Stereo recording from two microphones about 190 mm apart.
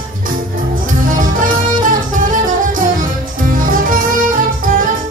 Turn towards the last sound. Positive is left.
turn(degrees=-45)  # may be behind; listen again after turning